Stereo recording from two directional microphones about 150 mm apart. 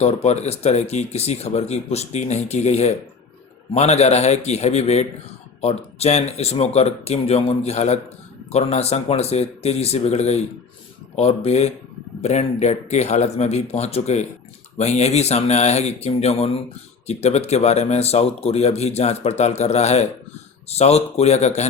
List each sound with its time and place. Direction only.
0.0 s speech: 45° left (ahead or behind)